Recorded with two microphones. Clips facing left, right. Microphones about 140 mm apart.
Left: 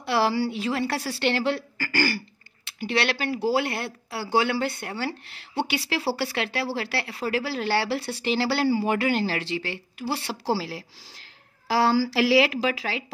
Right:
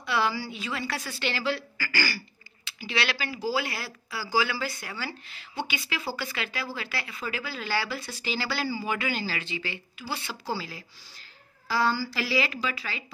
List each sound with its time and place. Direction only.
0.0 s a woman's voice: 65° left (ahead or behind)
10.5 s speech: 75° left (ahead or behind)
11.6 s a woman's voice: 90° left